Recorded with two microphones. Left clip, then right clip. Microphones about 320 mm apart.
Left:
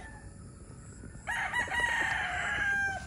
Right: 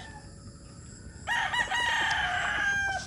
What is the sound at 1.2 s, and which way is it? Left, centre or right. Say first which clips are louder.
Chicken: right 4 dB; right.